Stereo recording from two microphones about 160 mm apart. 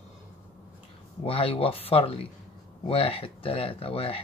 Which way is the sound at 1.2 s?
35° left (ahead or behind).